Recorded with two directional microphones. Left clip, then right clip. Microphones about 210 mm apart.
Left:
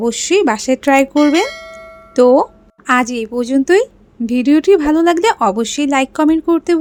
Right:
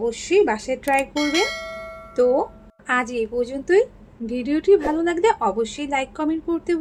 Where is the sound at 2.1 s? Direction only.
45° left (ahead or behind).